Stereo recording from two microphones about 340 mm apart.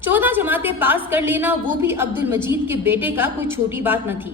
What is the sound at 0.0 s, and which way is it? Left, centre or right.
A woman's voice, centre.